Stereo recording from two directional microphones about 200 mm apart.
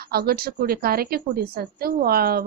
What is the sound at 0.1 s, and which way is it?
A woman's voice, 50° right (ahead or behind).